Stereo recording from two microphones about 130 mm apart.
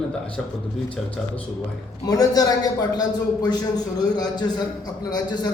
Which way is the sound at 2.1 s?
30° left (ahead or behind).